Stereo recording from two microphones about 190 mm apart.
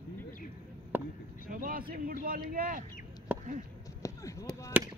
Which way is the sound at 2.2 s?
50° right (ahead or behind).